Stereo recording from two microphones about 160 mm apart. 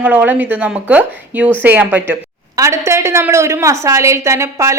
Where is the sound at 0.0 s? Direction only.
10° right (ahead or behind).